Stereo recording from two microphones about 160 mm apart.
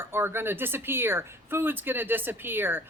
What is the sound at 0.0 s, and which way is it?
Speech, 15° right (ahead or behind).